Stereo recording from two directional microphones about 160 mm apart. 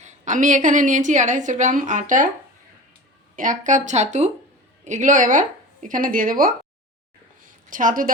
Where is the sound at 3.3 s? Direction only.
55° right (ahead or behind).